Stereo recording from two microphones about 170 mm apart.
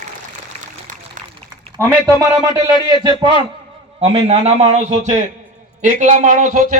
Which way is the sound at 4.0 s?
35° right (ahead or behind).